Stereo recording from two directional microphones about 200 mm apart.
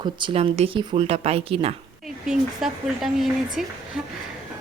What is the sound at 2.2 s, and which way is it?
Speech, centre (ahead or behind).